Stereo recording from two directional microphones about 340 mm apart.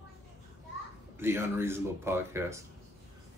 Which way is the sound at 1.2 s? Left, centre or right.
Centre.